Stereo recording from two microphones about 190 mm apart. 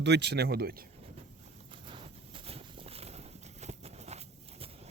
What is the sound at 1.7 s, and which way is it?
Clip-clop, 25° right (ahead or behind).